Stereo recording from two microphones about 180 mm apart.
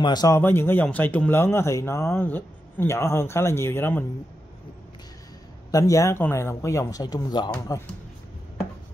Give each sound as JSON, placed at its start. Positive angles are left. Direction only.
{"t": 0.0, "sound": "a man's voice", "side_deg": 20}
{"t": 5.7, "sound": "speech", "side_deg": 20}